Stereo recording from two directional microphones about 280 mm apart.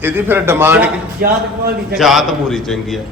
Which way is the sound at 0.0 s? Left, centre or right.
Centre.